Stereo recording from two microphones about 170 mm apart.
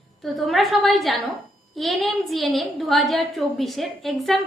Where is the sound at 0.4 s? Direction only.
Centre (ahead or behind).